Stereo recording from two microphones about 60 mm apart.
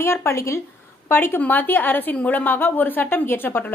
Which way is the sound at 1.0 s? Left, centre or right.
Left.